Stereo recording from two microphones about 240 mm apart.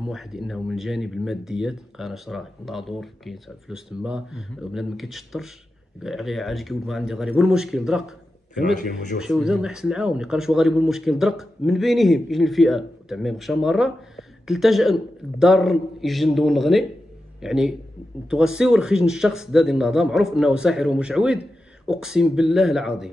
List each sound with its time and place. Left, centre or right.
0.0 s speech: centre
8.7 s speech: left
9.2 s speech: centre